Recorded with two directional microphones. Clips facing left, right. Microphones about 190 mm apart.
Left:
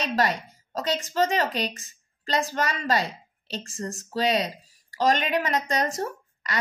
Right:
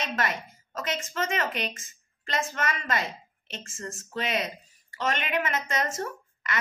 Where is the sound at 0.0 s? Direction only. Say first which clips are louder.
Left 5 dB; 35° left (ahead or behind).